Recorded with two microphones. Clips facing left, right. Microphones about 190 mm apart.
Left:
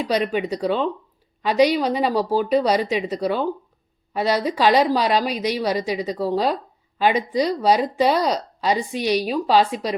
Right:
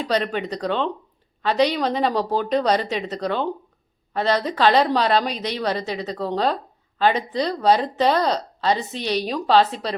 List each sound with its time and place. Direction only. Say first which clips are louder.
0.0 s a woman's voice: left 2 dB; 10° left (ahead or behind)